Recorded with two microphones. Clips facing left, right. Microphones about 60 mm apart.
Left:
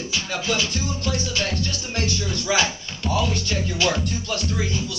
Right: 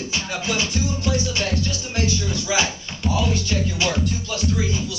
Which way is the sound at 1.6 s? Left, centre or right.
Centre.